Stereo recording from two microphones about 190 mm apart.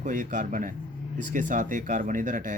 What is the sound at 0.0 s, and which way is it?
Speech, 40° right (ahead or behind).